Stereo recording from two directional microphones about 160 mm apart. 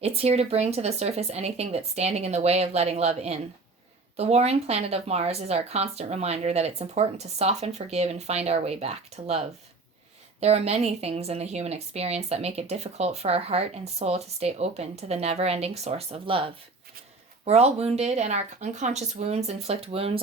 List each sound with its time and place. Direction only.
0.0 s a woman's voice: 40° right (ahead or behind)
10.4 s a woman's voice: 40° right (ahead or behind)